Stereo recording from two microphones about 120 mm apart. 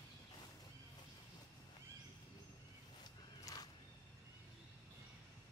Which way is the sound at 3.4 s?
35° left (ahead or behind).